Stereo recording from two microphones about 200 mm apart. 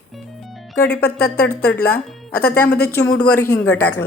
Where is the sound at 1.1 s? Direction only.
50° left (ahead or behind).